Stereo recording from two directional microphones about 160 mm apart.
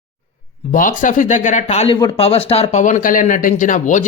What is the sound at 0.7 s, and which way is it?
A man's voice, 55° left (ahead or behind).